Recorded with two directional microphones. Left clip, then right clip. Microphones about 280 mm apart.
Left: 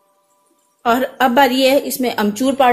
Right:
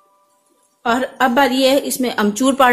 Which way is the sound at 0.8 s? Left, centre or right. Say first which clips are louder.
Left 1 dB; centre.